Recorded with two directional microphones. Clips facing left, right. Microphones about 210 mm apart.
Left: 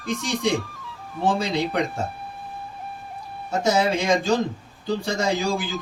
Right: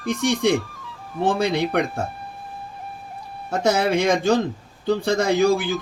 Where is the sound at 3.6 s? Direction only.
60° right (ahead or behind).